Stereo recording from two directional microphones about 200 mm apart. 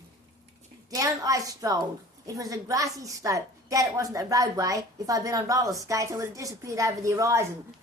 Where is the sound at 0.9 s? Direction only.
15° right (ahead or behind).